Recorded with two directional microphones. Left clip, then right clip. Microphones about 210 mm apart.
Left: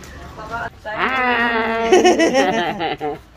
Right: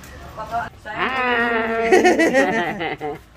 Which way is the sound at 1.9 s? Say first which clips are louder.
Left 1 dB; 15° right (ahead or behind).